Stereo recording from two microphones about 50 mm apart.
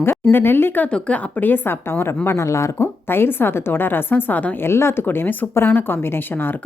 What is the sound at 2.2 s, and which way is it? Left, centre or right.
Speech, left.